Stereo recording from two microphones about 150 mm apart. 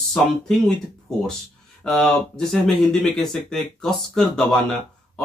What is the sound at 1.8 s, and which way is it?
Speech, 5° left (ahead or behind).